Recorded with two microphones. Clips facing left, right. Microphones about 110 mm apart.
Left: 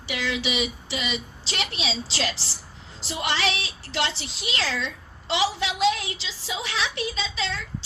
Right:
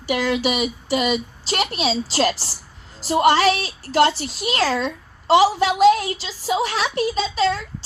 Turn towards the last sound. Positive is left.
turn(degrees=-45)  # may be behind; listen again after turning